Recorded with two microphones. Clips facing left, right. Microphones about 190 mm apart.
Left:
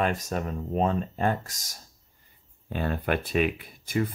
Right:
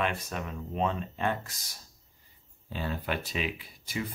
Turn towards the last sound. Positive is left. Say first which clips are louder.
# left 8 dB
turn(degrees=50)  # may be behind; listen again after turning